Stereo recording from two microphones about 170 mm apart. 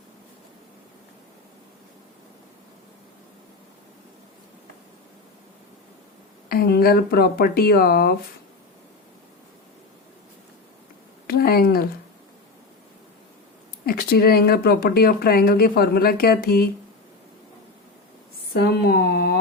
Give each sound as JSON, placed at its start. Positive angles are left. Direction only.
{"t": 6.5, "sound": "speech", "side_deg": 65}
{"t": 11.3, "sound": "speech", "side_deg": 60}
{"t": 13.8, "sound": "speech", "side_deg": 65}
{"t": 18.5, "sound": "speech", "side_deg": 75}